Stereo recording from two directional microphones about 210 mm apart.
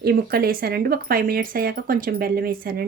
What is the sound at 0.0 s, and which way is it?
Speech, 45° right (ahead or behind).